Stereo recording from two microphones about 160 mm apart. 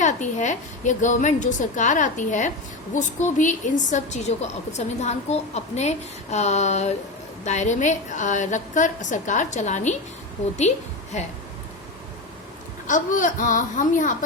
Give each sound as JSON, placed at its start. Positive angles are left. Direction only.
{"t": 0.0, "sound": "a woman's voice", "side_deg": 50}
{"t": 12.9, "sound": "a woman's voice", "side_deg": 55}